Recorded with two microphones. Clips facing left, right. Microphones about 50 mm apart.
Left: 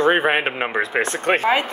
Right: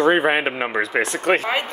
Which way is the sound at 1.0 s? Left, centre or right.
Left.